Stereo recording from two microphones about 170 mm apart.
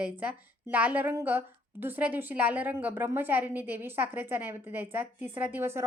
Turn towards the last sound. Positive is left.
turn(degrees=-15)  # may be behind; listen again after turning